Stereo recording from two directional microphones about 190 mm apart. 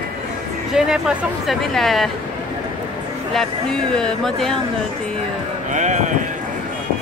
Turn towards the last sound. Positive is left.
turn(degrees=-40)  # may be behind; listen again after turning